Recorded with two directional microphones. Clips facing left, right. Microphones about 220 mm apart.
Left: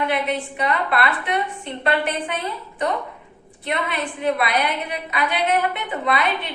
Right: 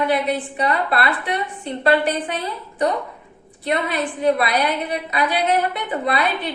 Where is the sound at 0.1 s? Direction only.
35° right (ahead or behind).